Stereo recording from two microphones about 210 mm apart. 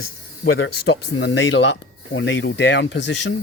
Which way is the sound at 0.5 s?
65° left (ahead or behind).